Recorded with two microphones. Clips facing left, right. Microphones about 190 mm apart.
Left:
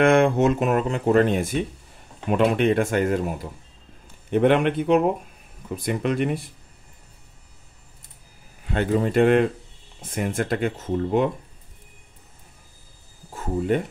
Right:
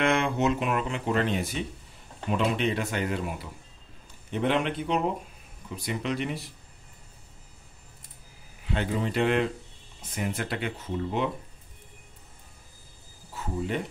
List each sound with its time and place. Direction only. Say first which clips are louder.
0.0 s speech: left 8 dB; 50° left (ahead or behind)
4.3 s a man's voice: left 8 dB; 55° left (ahead or behind)
8.6 s speech: left 7 dB; 50° left (ahead or behind)
13.3 s speech: left 8 dB; 50° left (ahead or behind)